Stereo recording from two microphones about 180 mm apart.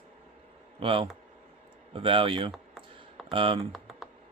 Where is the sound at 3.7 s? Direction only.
Centre (ahead or behind).